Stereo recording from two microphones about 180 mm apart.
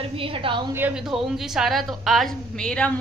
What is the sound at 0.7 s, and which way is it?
A woman's voice, 5° right (ahead or behind).